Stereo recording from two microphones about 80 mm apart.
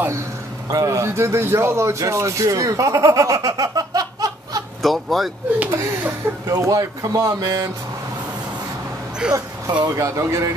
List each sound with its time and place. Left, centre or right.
0.7 s speech: right
4.8 s speech: centre
5.7 s speech: right
9.9 s speech: right